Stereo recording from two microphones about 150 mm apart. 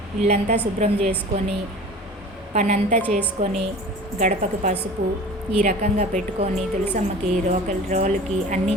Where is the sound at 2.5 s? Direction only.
55° right (ahead or behind).